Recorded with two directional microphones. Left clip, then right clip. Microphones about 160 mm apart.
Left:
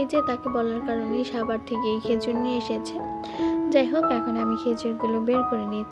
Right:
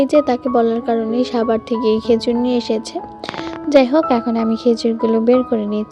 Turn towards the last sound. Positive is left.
turn(degrees=-40)  # may be behind; listen again after turning